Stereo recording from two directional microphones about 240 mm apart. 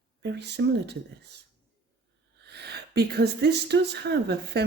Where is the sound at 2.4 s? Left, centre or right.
Right.